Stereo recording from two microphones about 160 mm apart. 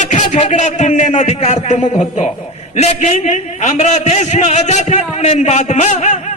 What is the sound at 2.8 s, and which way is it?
A man's voice, 45° left (ahead or behind).